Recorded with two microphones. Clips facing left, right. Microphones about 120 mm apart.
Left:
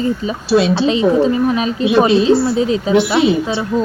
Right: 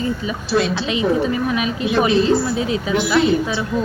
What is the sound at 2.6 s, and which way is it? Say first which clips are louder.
Speech: left 6 dB; 30° left (ahead or behind).